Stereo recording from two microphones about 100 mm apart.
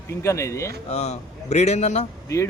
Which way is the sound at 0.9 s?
90° left.